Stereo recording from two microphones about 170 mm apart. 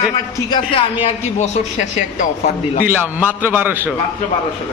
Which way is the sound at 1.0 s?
40° left (ahead or behind).